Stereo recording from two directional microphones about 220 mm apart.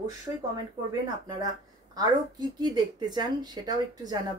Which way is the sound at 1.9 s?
15° right (ahead or behind).